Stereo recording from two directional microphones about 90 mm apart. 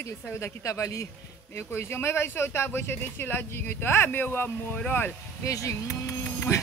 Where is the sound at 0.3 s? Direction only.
30° left (ahead or behind).